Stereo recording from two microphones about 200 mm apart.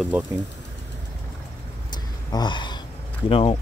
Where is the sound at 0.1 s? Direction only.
10° right (ahead or behind).